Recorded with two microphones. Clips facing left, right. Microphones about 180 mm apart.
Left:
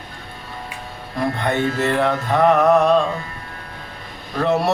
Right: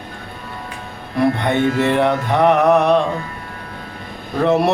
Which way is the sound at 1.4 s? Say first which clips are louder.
Right 3 dB; 20° right (ahead or behind).